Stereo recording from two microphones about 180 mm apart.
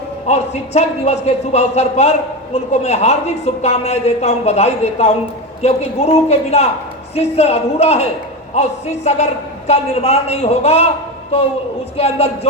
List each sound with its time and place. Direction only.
0.3 s speech: 35° left (ahead or behind)